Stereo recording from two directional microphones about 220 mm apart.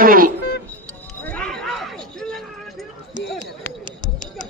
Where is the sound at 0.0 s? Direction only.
40° right (ahead or behind).